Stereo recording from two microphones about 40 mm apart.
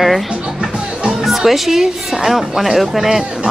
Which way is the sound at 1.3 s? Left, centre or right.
Centre.